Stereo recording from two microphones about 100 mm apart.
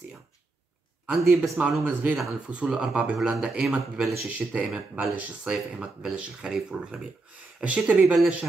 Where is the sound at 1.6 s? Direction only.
15° right (ahead or behind).